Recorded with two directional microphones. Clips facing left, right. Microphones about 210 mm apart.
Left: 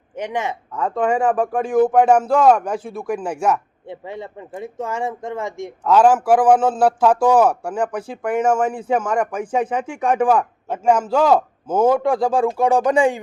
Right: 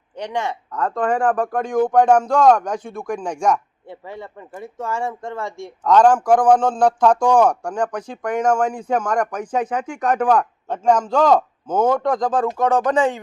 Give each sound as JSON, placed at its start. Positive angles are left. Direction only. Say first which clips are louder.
{"t": 0.2, "sound": "a man's voice", "louder": "left 1 dB", "side_deg": 15}
{"t": 3.8, "sound": "speech", "louder": "left 3 dB", "side_deg": 20}
{"t": 5.8, "sound": "a man's voice", "louder": "even", "side_deg": 5}